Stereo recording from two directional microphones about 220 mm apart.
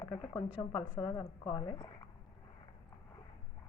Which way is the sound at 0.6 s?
20° left (ahead or behind).